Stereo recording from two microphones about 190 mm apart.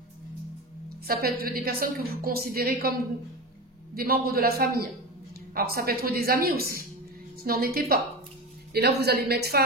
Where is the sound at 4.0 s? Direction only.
50° right (ahead or behind).